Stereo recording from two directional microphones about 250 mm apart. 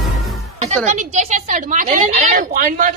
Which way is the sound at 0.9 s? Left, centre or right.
Right.